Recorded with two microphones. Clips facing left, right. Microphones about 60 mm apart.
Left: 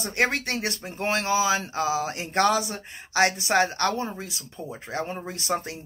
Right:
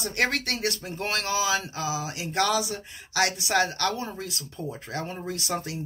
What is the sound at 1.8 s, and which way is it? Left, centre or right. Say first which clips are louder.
Speech: left 5 dB; left.